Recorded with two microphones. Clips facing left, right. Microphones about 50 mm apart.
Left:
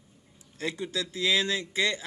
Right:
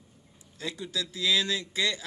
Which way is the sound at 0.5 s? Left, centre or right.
Left.